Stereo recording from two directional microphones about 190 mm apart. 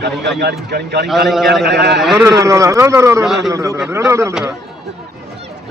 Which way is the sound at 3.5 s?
15° right (ahead or behind).